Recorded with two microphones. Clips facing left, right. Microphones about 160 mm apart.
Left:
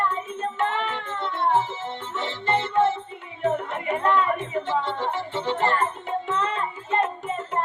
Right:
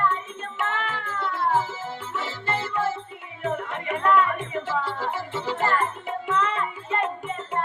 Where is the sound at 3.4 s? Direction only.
30° left (ahead or behind).